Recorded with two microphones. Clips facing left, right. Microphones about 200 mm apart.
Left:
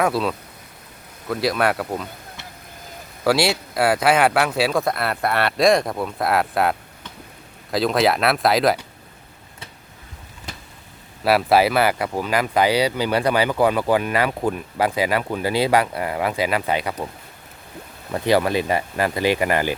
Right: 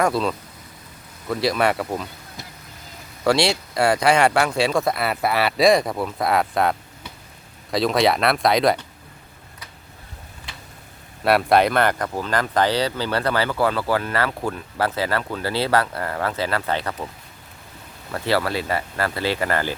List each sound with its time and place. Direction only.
0.0 s speech: centre (ahead or behind)
3.2 s speech: 5° left (ahead or behind)
10.5 s a sound: 40° left (ahead or behind)
11.2 s speech: centre (ahead or behind)
18.1 s speech: 15° left (ahead or behind)